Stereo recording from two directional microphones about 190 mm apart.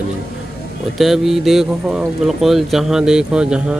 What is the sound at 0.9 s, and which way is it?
Speech, centre (ahead or behind).